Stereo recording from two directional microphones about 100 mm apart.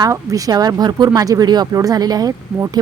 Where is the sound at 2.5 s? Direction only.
30° right (ahead or behind).